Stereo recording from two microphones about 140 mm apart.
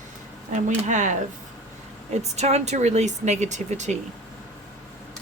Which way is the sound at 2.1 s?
50° right (ahead or behind).